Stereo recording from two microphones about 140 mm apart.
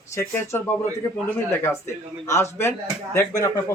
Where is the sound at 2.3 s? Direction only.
20° left (ahead or behind).